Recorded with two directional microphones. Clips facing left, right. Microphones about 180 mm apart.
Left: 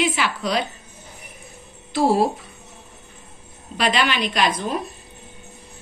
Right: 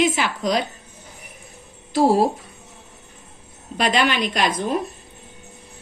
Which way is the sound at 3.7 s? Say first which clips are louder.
Right 1 dB; 45° right (ahead or behind).